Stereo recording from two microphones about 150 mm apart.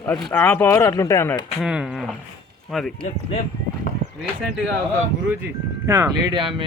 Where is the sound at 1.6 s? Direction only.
5° right (ahead or behind).